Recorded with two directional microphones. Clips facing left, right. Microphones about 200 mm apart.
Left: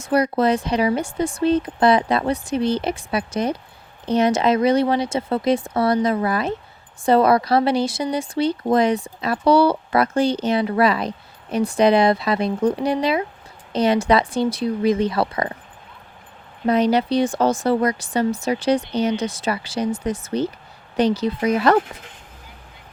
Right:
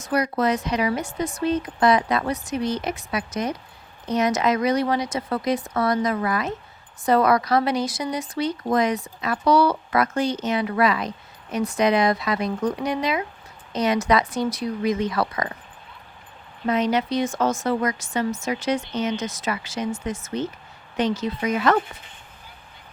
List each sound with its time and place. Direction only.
0.0 s speech: 30° left (ahead or behind)
16.6 s speech: 35° left (ahead or behind)